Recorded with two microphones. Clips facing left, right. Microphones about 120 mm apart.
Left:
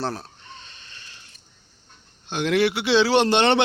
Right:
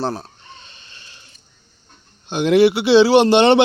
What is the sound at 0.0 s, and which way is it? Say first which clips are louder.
Speech: right 5 dB; 20° right (ahead or behind).